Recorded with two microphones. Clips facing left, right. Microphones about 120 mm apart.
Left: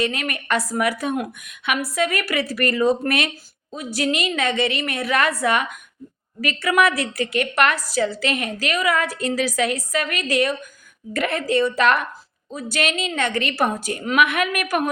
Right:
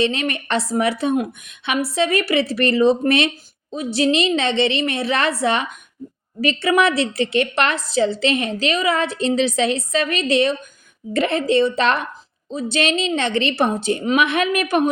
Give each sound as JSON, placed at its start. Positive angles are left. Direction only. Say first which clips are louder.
{"t": 0.0, "sound": "a woman's voice", "louder": "right 4 dB", "side_deg": -25}